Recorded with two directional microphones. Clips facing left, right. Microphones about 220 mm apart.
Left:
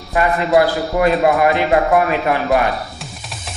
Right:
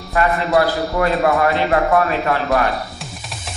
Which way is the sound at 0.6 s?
15° left (ahead or behind).